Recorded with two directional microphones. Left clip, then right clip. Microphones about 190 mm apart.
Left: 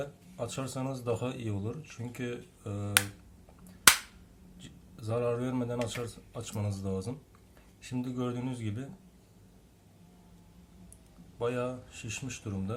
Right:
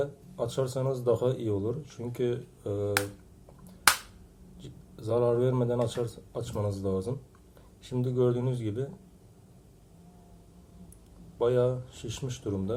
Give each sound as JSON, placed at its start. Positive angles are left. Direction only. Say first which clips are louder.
{"t": 0.0, "sound": "speech", "louder": "right 6 dB", "side_deg": -25}
{"t": 4.6, "sound": "speech", "louder": "right 6 dB", "side_deg": -25}
{"t": 11.3, "sound": "speech", "louder": "right 7 dB", "side_deg": -25}